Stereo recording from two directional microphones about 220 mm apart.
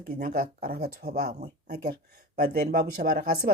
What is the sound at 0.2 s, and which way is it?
Speech, 40° right (ahead or behind).